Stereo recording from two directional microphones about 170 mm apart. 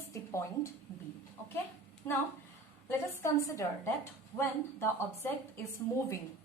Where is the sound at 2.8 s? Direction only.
15° left (ahead or behind).